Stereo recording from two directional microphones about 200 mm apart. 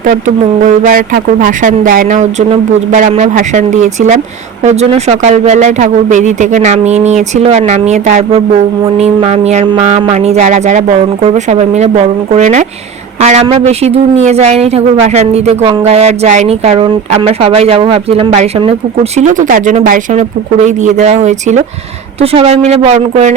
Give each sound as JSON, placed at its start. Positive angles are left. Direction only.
{"t": 0.6, "sound": "speech", "side_deg": -45}